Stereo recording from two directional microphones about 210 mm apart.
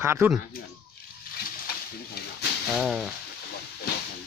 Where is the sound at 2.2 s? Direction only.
50° left (ahead or behind).